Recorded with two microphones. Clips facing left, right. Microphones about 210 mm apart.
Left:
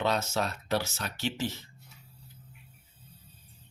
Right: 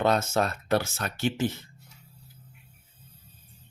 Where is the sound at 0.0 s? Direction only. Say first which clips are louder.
Right 5 dB; 50° right (ahead or behind).